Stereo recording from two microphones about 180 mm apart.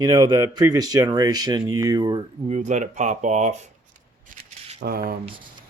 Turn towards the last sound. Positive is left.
turn(degrees=-55)  # may be behind; listen again after turning